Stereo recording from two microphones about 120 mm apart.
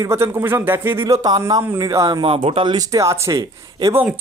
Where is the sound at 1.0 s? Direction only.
30° right (ahead or behind).